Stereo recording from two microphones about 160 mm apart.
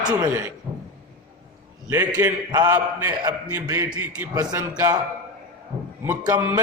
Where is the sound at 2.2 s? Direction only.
15° right (ahead or behind).